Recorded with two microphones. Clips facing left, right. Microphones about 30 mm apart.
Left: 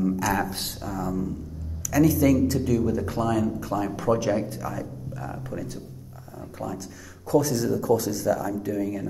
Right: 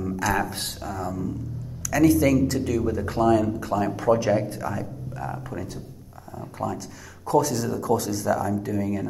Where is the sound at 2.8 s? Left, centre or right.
Right.